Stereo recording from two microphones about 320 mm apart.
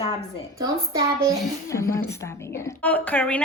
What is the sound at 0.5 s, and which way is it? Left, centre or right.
Speech, centre.